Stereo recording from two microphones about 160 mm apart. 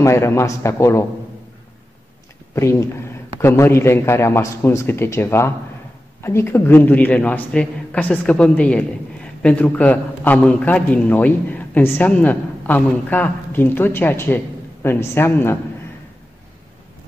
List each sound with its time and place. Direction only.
0.0 s a man's voice: 15° left (ahead or behind)
2.5 s a man's voice: 15° left (ahead or behind)